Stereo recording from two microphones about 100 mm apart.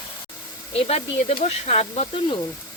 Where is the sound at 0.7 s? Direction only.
90° left; by 2.3 s 70° left (ahead or behind).